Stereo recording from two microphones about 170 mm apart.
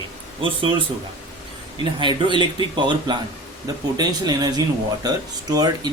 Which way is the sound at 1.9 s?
30° right (ahead or behind).